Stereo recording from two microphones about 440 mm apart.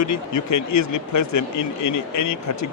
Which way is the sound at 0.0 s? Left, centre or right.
Left.